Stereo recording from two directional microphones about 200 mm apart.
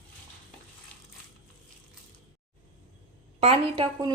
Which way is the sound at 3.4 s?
25° right (ahead or behind).